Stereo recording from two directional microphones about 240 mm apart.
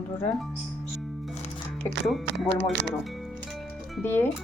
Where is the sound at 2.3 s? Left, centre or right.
Right.